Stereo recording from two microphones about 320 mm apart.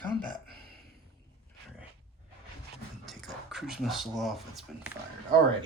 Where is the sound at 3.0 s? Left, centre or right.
Centre.